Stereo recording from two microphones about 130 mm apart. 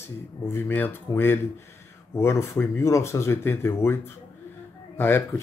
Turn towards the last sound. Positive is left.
turn(degrees=20)  # may be behind; listen again after turning